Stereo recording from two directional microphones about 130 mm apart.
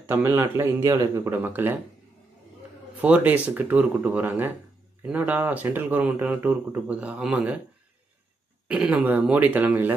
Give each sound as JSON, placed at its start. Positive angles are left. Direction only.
{"t": 0.0, "sound": "speech", "side_deg": -15}
{"t": 3.0, "sound": "speech", "side_deg": -15}
{"t": 8.6, "sound": "speech", "side_deg": -10}